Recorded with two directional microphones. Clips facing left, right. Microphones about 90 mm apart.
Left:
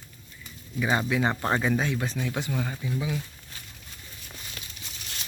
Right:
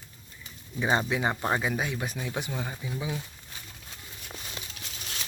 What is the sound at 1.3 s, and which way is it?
Speech, 10° right (ahead or behind).